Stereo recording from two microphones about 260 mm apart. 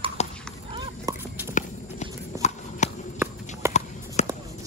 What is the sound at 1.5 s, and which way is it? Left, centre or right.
Walk, left.